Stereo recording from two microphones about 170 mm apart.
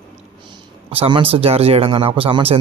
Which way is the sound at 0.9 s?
35° right (ahead or behind).